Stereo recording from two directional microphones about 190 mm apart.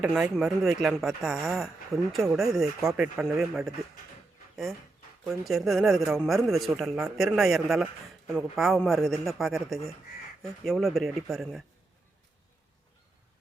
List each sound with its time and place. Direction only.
0.0 s speech: 5° right (ahead or behind)
5.2 s speech: centre (ahead or behind)